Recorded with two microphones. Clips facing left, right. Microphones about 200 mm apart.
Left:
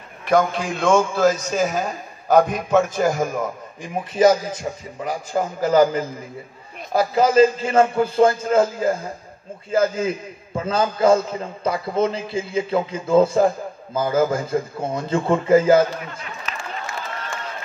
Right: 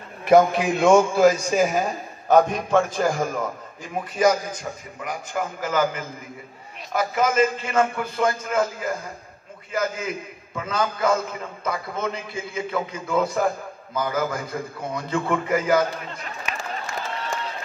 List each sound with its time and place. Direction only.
0.2 s a man's voice: 25° right (ahead or behind); by 3.4 s 10° left (ahead or behind)
4.2 s a man's voice: 25° left (ahead or behind)
16.5 s run: 15° right (ahead or behind)